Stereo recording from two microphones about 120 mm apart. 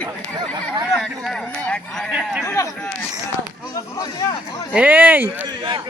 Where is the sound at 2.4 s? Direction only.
25° left (ahead or behind).